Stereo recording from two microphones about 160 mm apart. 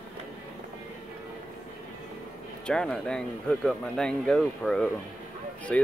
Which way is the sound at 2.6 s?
5° left (ahead or behind).